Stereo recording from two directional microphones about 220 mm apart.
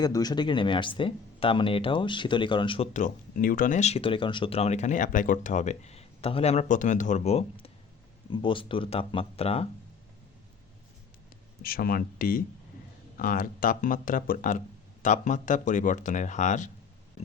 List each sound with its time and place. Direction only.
0.0 s speech: 15° left (ahead or behind)
11.6 s speech: 40° left (ahead or behind)